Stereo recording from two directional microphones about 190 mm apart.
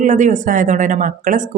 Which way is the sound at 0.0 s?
40° right (ahead or behind).